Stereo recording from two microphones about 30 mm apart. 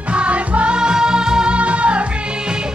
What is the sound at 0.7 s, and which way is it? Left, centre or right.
Music, right.